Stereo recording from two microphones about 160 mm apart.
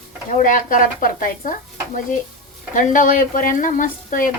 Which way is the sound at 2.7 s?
55° left (ahead or behind).